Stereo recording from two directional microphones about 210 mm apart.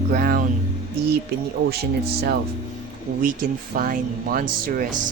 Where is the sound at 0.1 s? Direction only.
45° right (ahead or behind).